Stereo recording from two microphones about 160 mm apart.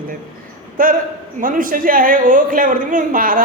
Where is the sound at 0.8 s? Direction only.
60° right (ahead or behind).